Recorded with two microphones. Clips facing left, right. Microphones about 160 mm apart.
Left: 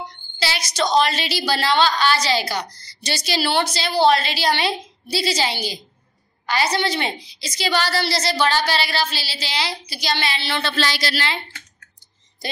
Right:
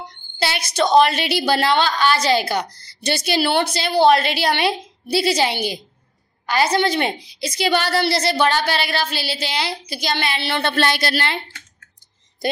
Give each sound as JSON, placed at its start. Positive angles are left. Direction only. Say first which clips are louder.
{"t": 0.4, "sound": "a woman's voice", "louder": "right 3 dB", "side_deg": -55}